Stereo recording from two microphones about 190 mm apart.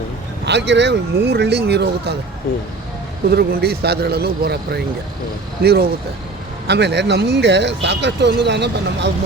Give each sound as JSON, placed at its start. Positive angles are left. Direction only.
{"t": 0.4, "sound": "speech", "side_deg": -65}
{"t": 3.2, "sound": "speech", "side_deg": -55}